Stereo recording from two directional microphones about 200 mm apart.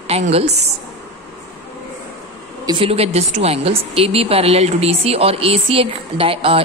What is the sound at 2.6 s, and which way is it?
Speech, 25° right (ahead or behind).